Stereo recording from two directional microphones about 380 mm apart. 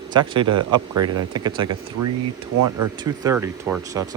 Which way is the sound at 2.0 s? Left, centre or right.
Right.